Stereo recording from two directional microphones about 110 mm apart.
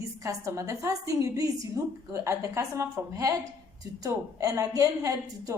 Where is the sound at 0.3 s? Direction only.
30° right (ahead or behind).